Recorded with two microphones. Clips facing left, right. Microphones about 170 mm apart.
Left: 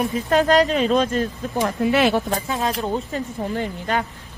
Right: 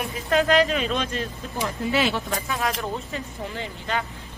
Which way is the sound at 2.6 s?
25° left (ahead or behind).